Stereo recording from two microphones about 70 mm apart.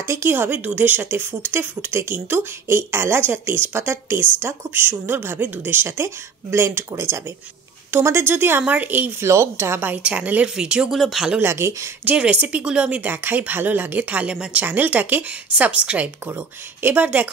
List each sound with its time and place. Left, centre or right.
0.0 s speech: right
9.3 s speech: right
9.8 s speech: right
10.5 s speech: centre
11.0 s speech: centre
11.4 s speech: right
12.0 s speech: centre
13.1 s speech: right
16.3 s speech: right